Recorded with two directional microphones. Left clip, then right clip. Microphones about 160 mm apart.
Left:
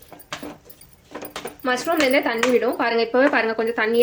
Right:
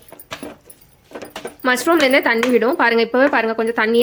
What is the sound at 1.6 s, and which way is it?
Speech, 55° right (ahead or behind).